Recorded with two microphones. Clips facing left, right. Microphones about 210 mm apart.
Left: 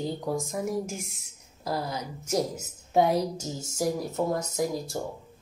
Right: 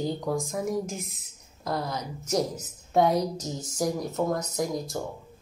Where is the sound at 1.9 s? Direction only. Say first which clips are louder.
Right 1 dB; 30° left (ahead or behind).